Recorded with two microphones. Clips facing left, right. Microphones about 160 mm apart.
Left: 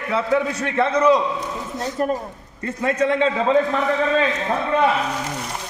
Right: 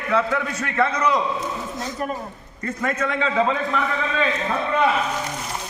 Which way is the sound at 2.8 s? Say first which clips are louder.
Left 5 dB; 30° left (ahead or behind).